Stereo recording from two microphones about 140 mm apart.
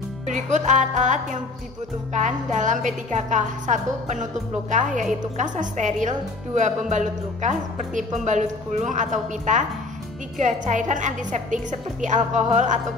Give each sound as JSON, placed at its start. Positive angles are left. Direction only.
{"t": 0.3, "sound": "a woman's voice", "side_deg": -60}